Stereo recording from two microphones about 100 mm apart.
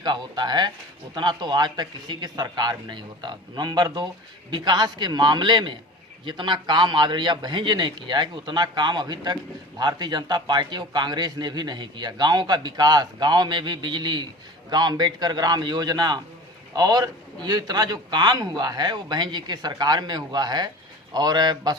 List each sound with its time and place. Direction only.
0.0 s a man's voice: 45° right (ahead or behind)